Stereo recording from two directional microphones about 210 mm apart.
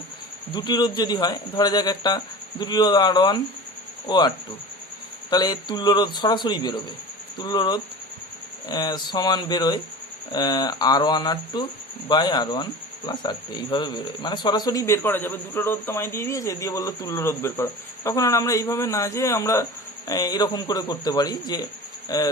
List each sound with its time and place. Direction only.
0.5 s speech: 20° left (ahead or behind)
5.3 s speech: 20° left (ahead or behind)